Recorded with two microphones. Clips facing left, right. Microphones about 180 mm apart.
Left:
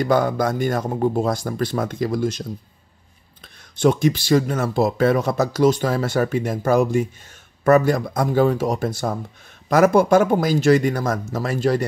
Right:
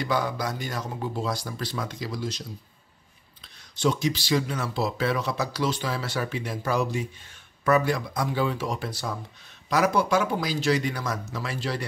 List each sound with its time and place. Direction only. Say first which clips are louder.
0.0 s speech: left 8 dB; 50° left (ahead or behind)
3.7 s speech: left 8 dB; 55° left (ahead or behind)